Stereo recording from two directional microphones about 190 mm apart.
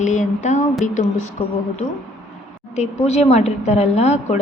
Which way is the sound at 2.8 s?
35° left (ahead or behind).